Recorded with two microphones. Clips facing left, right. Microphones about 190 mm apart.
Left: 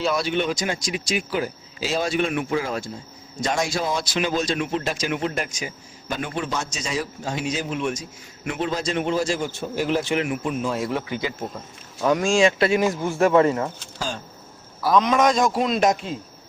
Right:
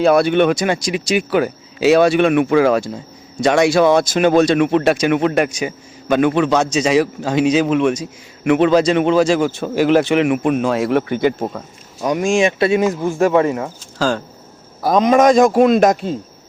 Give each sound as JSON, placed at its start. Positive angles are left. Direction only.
{"t": 0.0, "sound": "speech", "side_deg": -55}
{"t": 3.4, "sound": "speech", "side_deg": -70}
{"t": 4.0, "sound": "speech", "side_deg": -50}
{"t": 8.4, "sound": "a man's voice", "side_deg": -80}
{"t": 11.9, "sound": "speech", "side_deg": -15}
{"t": 14.8, "sound": "a man's voice", "side_deg": -45}